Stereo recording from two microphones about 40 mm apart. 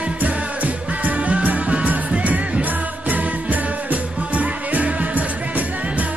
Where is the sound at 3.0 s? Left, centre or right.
Right.